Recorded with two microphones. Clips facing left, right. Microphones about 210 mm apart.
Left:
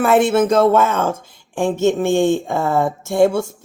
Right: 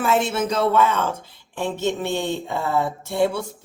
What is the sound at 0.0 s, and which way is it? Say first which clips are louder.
A woman's voice: left 7 dB; 55° left (ahead or behind).